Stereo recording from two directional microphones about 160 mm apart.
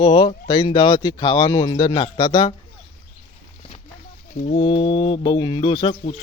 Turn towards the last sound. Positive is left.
turn(degrees=35)  # may be behind; listen again after turning